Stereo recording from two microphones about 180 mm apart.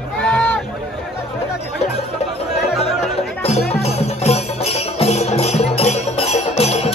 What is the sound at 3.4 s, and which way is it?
Music, 35° left (ahead or behind).